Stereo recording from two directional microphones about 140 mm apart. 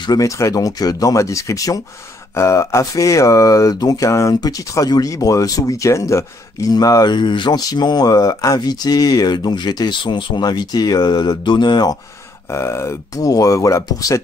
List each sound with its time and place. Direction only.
0.0 s speech: 25° left (ahead or behind)
12.5 s speech: 20° left (ahead or behind)